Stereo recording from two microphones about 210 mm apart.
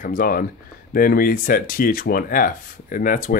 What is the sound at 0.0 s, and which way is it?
Speech, 40° left (ahead or behind).